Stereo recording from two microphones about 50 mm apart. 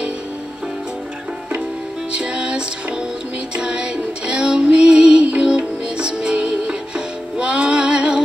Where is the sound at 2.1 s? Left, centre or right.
Centre.